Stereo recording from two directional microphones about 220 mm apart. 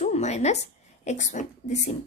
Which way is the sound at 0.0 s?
30° left (ahead or behind).